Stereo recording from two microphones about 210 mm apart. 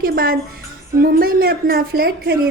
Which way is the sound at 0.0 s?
45° right (ahead or behind).